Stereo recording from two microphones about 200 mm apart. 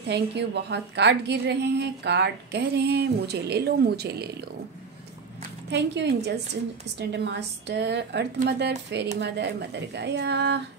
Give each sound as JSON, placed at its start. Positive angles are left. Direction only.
{"t": 0.1, "sound": "a woman's voice", "side_deg": -60}
{"t": 5.7, "sound": "a woman's voice", "side_deg": -60}